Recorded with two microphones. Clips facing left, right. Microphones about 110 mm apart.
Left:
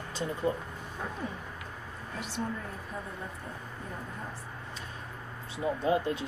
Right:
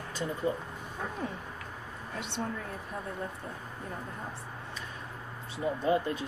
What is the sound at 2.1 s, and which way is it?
Speech, 70° right (ahead or behind).